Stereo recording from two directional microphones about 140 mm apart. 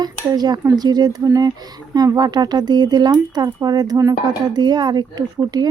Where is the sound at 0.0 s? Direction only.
30° right (ahead or behind).